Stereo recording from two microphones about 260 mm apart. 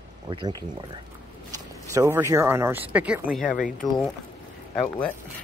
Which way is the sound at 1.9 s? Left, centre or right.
Centre.